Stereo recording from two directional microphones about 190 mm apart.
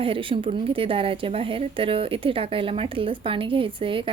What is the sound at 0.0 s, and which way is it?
A woman's voice, 30° right (ahead or behind).